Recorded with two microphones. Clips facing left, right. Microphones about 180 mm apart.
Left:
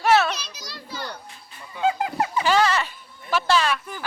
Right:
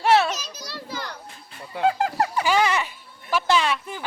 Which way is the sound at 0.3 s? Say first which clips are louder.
Even; 45° right (ahead or behind).